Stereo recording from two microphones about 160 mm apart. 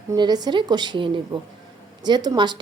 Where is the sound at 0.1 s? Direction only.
25° right (ahead or behind).